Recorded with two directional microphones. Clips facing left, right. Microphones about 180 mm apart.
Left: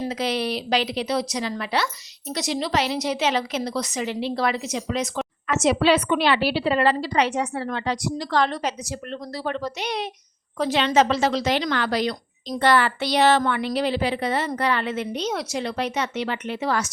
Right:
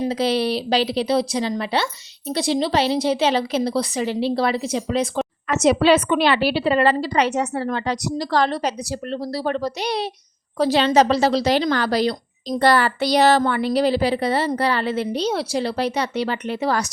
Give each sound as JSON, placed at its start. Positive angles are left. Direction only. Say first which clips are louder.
{"t": 0.1, "sound": "speech", "louder": "right 5 dB", "side_deg": -30}